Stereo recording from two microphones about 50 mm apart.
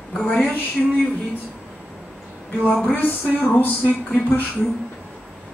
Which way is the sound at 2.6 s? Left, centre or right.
Left.